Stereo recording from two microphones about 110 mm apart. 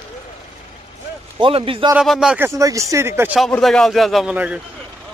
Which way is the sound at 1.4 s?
55° right (ahead or behind).